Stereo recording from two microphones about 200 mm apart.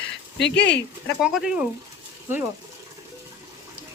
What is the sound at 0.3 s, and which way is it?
Speech, 60° left (ahead or behind).